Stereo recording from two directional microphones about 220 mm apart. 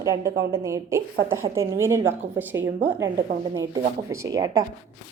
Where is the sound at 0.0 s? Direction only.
15° right (ahead or behind).